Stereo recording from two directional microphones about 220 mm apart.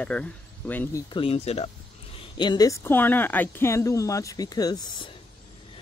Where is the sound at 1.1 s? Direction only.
25° left (ahead or behind).